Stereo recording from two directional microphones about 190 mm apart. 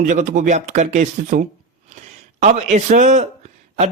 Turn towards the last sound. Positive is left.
turn(degrees=-35)  # may be behind; listen again after turning